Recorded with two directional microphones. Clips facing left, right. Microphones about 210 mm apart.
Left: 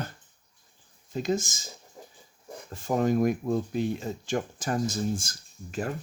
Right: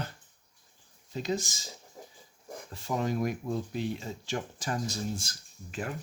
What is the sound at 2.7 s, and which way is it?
Speech, 45° left (ahead or behind).